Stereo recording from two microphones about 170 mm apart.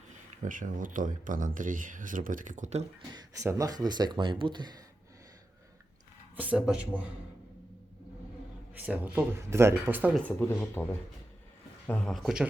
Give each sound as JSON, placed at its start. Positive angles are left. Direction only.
{"t": 0.4, "sound": "speech", "side_deg": -50}
{"t": 3.2, "sound": "speech", "side_deg": -20}
{"t": 6.3, "sound": "speech", "side_deg": -10}
{"t": 8.8, "sound": "speech", "side_deg": -10}
{"t": 10.2, "sound": "speech", "side_deg": 10}
{"t": 11.9, "sound": "speech", "side_deg": 5}